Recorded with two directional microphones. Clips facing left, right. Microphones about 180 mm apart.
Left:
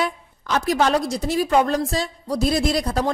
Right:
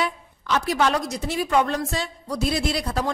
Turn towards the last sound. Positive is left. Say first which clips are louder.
# left 4 dB
turn(degrees=40)  # may be behind; listen again after turning